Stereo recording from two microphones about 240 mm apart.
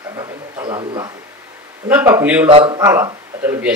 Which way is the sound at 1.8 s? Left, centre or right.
Centre.